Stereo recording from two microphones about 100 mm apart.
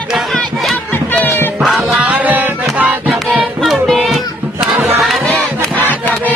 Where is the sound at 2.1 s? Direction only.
15° right (ahead or behind).